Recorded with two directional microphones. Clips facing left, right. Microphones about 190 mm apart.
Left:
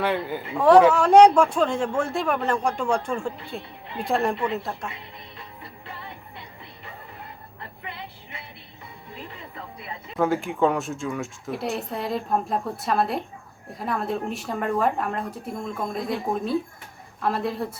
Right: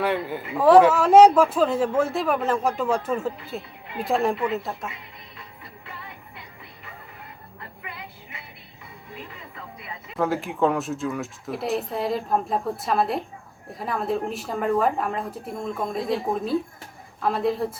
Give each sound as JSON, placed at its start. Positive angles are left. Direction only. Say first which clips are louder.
{"t": 0.0, "sound": "speech", "louder": "even", "side_deg": 0}
{"t": 10.2, "sound": "speech", "louder": "left 1 dB", "side_deg": 0}